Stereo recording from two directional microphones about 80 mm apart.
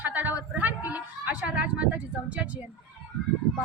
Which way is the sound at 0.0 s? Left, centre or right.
Right.